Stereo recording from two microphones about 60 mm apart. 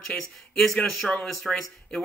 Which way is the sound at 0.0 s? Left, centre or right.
Centre.